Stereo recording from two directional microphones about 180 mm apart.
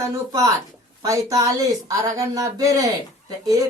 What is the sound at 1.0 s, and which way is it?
Speech, 20° right (ahead or behind).